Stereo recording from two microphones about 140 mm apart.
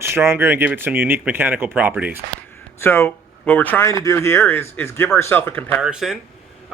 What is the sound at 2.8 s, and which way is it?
Speech, 15° left (ahead or behind).